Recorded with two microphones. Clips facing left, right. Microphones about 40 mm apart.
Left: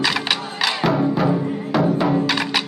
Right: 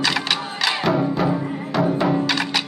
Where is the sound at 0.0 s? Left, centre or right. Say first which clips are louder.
Left 1 dB; centre.